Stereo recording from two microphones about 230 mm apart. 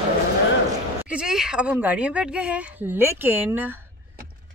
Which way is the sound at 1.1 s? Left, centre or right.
Centre.